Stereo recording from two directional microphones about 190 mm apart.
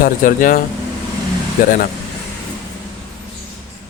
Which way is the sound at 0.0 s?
45° left (ahead or behind).